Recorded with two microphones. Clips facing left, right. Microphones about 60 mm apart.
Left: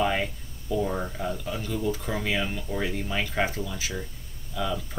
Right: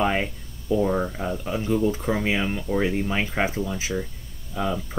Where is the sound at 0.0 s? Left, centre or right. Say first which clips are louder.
Right 2 dB; right.